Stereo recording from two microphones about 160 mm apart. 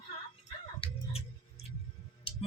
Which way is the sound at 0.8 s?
35° left (ahead or behind).